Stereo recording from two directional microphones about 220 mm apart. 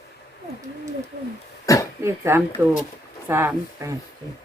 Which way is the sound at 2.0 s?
10° right (ahead or behind).